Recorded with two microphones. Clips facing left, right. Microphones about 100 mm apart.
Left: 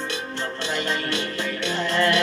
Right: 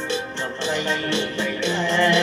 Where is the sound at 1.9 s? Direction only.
45° left (ahead or behind).